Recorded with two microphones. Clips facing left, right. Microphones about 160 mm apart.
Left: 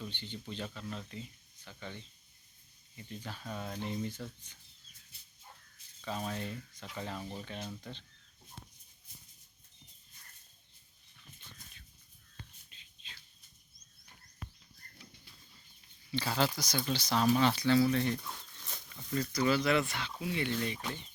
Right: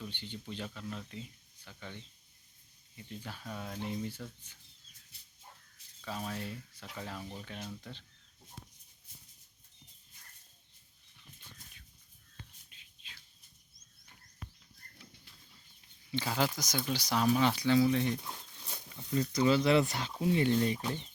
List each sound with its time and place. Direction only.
0.0 s speech: 10° right (ahead or behind)
6.1 s speech: 5° right (ahead or behind)
12.7 s a sound: 10° right (ahead or behind)
16.1 s speech: 10° right (ahead or behind); by 21.0 s 25° right (ahead or behind)